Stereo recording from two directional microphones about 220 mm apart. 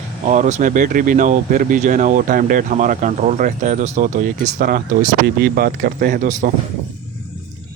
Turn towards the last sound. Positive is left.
turn(degrees=-35)  # may be behind; listen again after turning